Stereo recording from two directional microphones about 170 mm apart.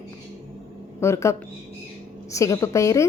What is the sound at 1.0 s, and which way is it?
A woman's voice, 15° left (ahead or behind).